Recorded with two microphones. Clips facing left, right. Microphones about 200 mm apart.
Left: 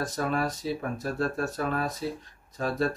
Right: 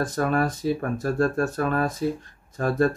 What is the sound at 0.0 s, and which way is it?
Speech, 50° right (ahead or behind).